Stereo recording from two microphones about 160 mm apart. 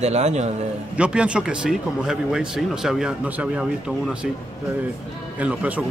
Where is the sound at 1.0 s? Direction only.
5° right (ahead or behind).